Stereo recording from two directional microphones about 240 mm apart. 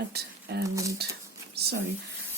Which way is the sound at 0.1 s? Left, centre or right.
Right.